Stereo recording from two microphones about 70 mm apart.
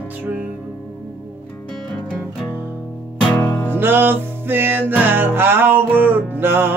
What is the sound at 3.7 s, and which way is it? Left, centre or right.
Music, right.